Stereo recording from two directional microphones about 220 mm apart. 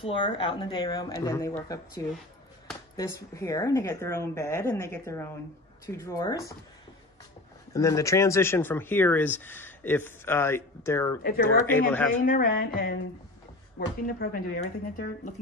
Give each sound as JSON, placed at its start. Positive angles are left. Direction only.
{"t": 0.0, "sound": "speech", "side_deg": 25}
{"t": 7.7, "sound": "speech", "side_deg": 15}
{"t": 12.3, "sound": "speech", "side_deg": 40}